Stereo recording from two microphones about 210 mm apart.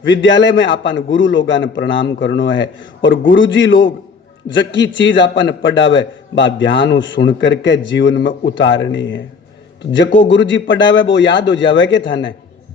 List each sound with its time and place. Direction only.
0.0 s a man's voice: 60° left (ahead or behind)